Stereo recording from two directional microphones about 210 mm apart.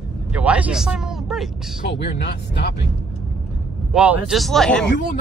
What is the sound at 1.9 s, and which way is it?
Speech, 55° left (ahead or behind).